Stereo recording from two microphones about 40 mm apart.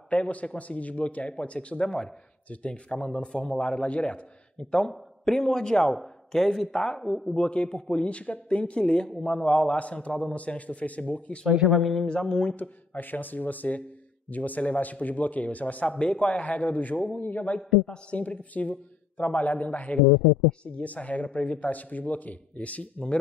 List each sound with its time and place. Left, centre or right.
0.1 s a man's voice: left; by 7.3 s centre
7.3 s a man's voice: left
9.8 s speech: left
11.4 s speech: centre
11.8 s speech: centre
12.2 s a man's voice: left
12.5 s a man's voice: left
16.0 s speech: left